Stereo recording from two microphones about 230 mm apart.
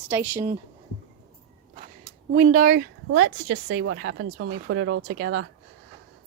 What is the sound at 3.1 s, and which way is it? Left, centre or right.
A woman's voice, right.